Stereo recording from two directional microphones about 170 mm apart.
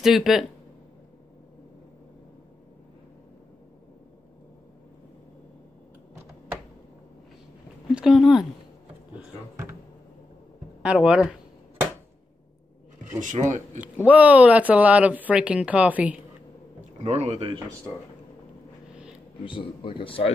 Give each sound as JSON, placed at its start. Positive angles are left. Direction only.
{"t": 0.0, "sound": "speech", "side_deg": 0}
{"t": 7.9, "sound": "speech", "side_deg": -5}
{"t": 9.1, "sound": "a sound", "side_deg": -15}
{"t": 10.8, "sound": "speech", "side_deg": -5}
{"t": 13.2, "sound": "speech", "side_deg": -50}
{"t": 14.0, "sound": "speech", "side_deg": -10}
{"t": 17.0, "sound": "speech", "side_deg": -40}
{"t": 19.4, "sound": "a man's voice", "side_deg": 30}